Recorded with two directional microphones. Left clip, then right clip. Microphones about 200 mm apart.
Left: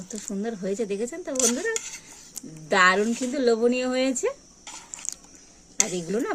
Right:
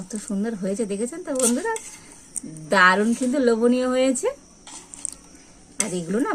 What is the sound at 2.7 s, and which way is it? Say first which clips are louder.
Speech: right 3 dB; 15° left (ahead or behind).